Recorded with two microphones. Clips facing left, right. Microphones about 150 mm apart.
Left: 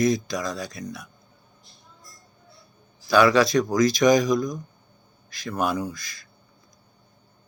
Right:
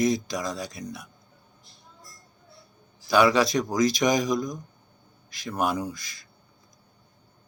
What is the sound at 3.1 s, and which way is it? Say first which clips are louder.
A man's voice: left 2 dB; 20° right (ahead or behind).